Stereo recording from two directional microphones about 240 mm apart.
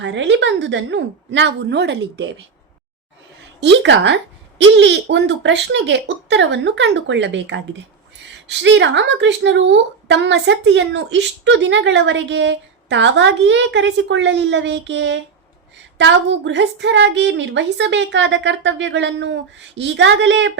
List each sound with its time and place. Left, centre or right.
0.0 s speech: right
3.6 s speech: right